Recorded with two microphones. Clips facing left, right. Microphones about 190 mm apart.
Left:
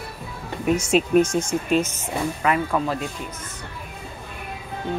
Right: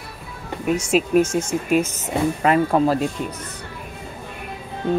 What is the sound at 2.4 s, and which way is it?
Speech, 35° right (ahead or behind).